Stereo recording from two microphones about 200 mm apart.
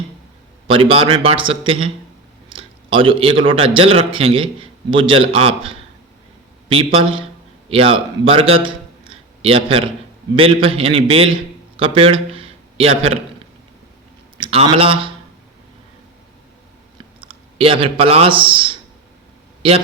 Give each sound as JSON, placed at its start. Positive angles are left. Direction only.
{"t": 0.7, "sound": "a man's voice", "side_deg": -25}
{"t": 14.3, "sound": "speech", "side_deg": -25}
{"t": 17.2, "sound": "speech", "side_deg": -25}